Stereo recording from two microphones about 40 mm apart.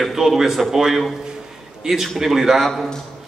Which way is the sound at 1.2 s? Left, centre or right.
Centre.